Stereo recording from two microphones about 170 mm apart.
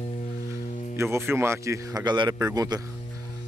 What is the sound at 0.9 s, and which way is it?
A man's voice, 15° right (ahead or behind).